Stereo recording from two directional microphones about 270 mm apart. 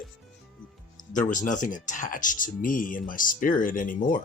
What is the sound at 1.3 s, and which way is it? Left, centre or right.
Speech, left.